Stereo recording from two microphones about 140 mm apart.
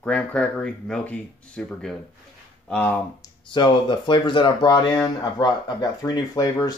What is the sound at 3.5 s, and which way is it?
Speech, 35° left (ahead or behind).